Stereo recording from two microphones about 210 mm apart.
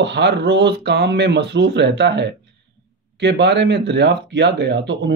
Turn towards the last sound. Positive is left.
turn(degrees=-55)  # may be behind; listen again after turning